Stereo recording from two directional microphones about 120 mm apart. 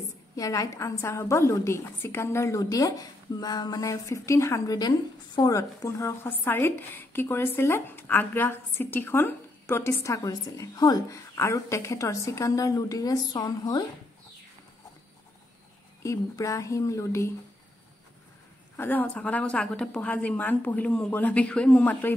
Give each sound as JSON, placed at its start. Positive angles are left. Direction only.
{"t": 0.4, "sound": "a woman's voice", "side_deg": 30}
{"t": 16.0, "sound": "a woman's voice", "side_deg": 25}
{"t": 18.8, "sound": "speech", "side_deg": 15}